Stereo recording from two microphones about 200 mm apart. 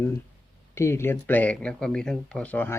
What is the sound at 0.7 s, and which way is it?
Speech, 15° left (ahead or behind).